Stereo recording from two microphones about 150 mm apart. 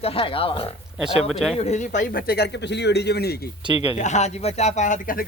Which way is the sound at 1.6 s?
50° left (ahead or behind).